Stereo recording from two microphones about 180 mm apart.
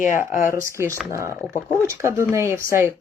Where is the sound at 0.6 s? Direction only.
15° right (ahead or behind).